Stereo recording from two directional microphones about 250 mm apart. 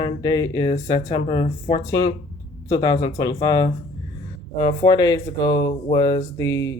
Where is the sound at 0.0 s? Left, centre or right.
Centre.